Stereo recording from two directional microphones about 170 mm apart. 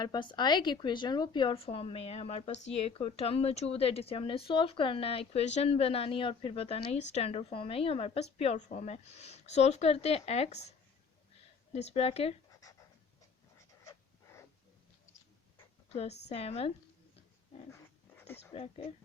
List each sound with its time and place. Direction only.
0.0 s a woman's voice: 25° left (ahead or behind)
15.9 s a woman's voice: 35° left (ahead or behind)
18.5 s a woman's voice: 35° left (ahead or behind)